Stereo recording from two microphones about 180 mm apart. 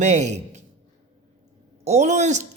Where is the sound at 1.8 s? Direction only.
40° right (ahead or behind).